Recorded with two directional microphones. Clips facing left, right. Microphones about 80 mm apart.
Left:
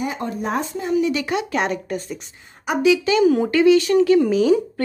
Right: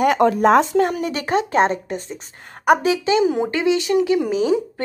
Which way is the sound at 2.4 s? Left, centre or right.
Right.